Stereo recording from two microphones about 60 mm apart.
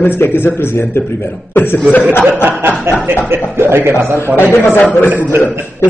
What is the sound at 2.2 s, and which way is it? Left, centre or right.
Chuckle, right.